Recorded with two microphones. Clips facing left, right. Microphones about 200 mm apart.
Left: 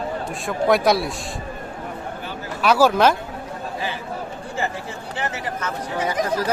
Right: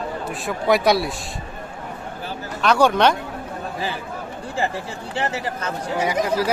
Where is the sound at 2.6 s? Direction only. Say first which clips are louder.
Left 1 dB; 5° left (ahead or behind).